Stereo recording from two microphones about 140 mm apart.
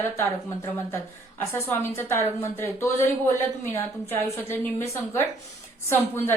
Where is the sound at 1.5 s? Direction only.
20° left (ahead or behind).